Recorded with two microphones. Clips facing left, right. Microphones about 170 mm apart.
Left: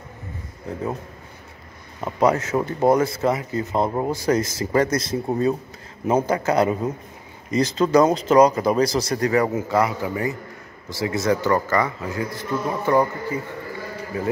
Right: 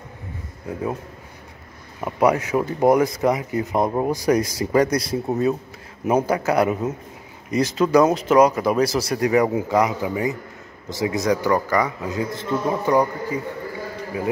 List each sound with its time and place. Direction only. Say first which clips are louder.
2.0 s a man's voice: right 1 dB; 10° right (ahead or behind)
14.1 s a man's voice: even; 10° right (ahead or behind)